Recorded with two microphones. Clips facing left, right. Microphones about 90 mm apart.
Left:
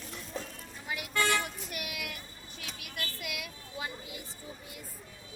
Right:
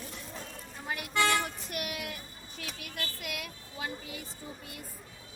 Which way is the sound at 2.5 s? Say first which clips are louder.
Right 2 dB; 45° right (ahead or behind).